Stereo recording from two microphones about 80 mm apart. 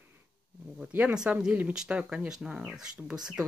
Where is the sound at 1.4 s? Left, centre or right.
Centre.